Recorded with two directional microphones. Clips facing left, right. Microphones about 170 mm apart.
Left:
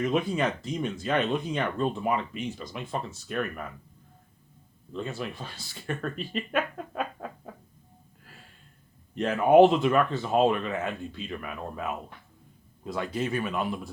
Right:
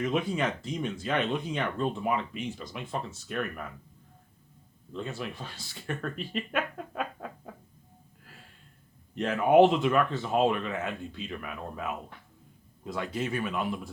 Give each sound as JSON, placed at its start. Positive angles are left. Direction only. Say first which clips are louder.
{"t": 0.0, "sound": "speech", "louder": "left 2 dB", "side_deg": 40}
{"t": 5.1, "sound": "speech", "louder": "left 2 dB", "side_deg": 35}
{"t": 9.1, "sound": "speech", "louder": "left 2 dB", "side_deg": 40}
{"t": 12.9, "sound": "speech", "louder": "left 2 dB", "side_deg": 35}